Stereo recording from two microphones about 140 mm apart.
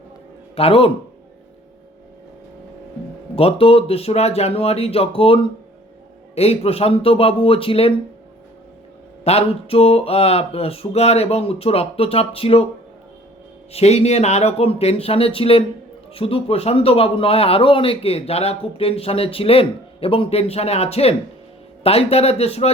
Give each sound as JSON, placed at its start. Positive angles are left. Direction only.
{"t": 0.5, "sound": "speech", "side_deg": 40}
{"t": 3.3, "sound": "speech", "side_deg": 45}
{"t": 9.2, "sound": "speech", "side_deg": 45}
{"t": 13.7, "sound": "speech", "side_deg": 50}